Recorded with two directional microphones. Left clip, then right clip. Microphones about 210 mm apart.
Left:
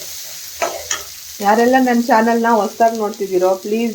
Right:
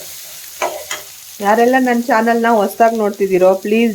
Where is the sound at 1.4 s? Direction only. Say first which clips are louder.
Right 1 dB; 10° right (ahead or behind).